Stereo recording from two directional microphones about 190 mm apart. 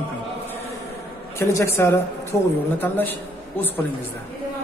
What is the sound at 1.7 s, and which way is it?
A woman's voice, 15° left (ahead or behind).